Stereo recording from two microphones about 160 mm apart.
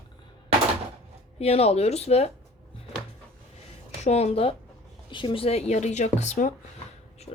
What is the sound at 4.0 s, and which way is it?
Speech, 45° left (ahead or behind).